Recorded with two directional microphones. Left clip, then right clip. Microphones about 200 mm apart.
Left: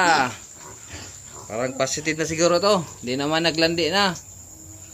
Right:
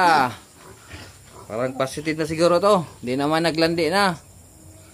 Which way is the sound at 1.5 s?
15° right (ahead or behind).